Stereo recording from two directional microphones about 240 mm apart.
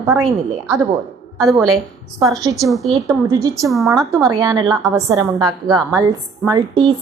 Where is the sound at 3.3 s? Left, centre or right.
Centre.